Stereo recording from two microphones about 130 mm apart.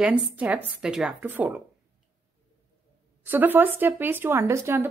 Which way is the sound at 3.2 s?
15° right (ahead or behind).